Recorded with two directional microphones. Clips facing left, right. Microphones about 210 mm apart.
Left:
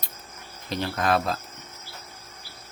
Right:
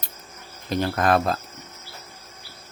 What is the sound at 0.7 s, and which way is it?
Speech, 50° right (ahead or behind).